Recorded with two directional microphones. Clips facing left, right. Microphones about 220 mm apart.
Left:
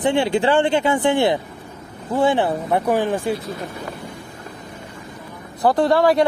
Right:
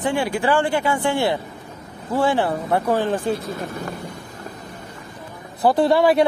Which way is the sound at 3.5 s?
45° right (ahead or behind).